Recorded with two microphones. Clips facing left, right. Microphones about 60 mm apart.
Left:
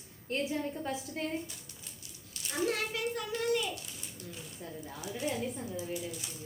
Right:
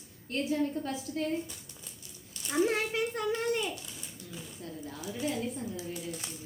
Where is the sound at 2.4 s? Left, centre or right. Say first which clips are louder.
Right 4 dB; right.